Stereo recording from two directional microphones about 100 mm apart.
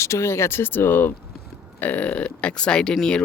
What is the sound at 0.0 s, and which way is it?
Speech, 30° left (ahead or behind).